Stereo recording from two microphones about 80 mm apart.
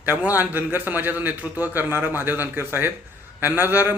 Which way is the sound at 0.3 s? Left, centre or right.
Right.